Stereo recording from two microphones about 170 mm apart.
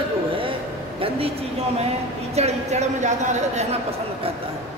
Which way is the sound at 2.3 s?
40° right (ahead or behind).